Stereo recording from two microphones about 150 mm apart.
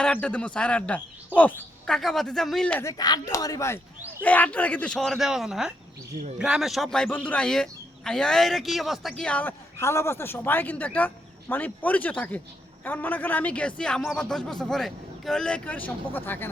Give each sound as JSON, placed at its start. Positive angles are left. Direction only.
{"t": 0.0, "sound": "speech", "side_deg": 10}
{"t": 2.8, "sound": "speech", "side_deg": 25}
{"t": 4.2, "sound": "speech", "side_deg": 10}